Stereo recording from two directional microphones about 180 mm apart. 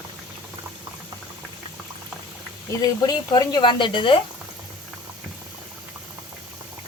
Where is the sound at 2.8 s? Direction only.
25° left (ahead or behind).